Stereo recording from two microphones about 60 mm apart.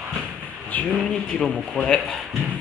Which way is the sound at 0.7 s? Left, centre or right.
Left.